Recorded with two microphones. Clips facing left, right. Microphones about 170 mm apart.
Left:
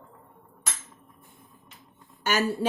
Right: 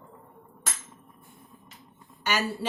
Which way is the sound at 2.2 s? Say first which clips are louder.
Left 3 dB; 50° left (ahead or behind).